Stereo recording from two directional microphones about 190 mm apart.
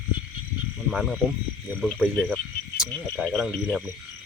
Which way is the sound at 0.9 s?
Centre (ahead or behind).